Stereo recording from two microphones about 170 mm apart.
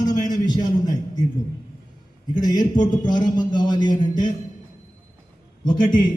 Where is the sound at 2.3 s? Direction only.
25° left (ahead or behind).